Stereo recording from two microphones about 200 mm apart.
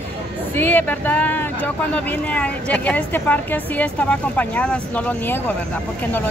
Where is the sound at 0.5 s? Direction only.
10° left (ahead or behind).